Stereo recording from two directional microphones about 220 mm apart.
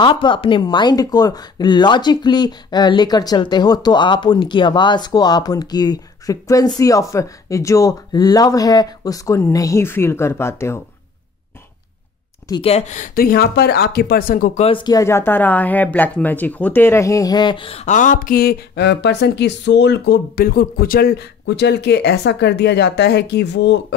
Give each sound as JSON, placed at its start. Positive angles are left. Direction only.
{"t": 0.0, "sound": "speech", "side_deg": 20}
{"t": 12.4, "sound": "speech", "side_deg": 25}